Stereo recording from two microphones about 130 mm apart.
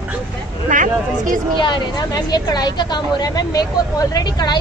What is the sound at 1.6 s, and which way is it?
A woman's voice, 35° left (ahead or behind).